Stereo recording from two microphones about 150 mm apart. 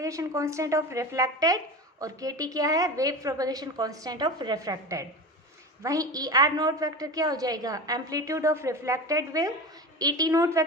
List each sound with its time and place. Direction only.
0.0 s speech: 20° right (ahead or behind)